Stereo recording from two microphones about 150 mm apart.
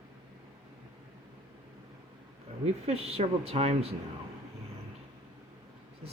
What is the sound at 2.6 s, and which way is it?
Speech, 40° right (ahead or behind).